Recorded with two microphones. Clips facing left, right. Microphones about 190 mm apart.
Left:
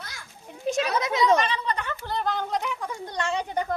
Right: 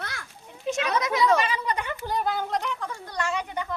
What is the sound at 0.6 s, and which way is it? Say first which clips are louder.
Speech: left 1 dB; 35° left (ahead or behind).